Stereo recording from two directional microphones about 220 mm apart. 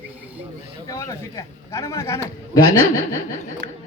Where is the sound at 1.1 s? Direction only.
15° left (ahead or behind).